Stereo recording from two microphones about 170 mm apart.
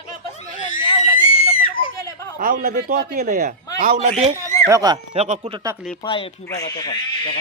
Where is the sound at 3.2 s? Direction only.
45° right (ahead or behind).